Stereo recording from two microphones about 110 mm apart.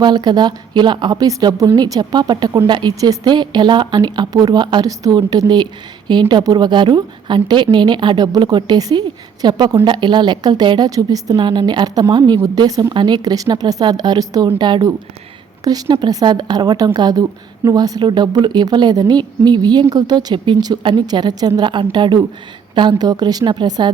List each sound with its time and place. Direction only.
0.0 s a woman's voice: 40° right (ahead or behind)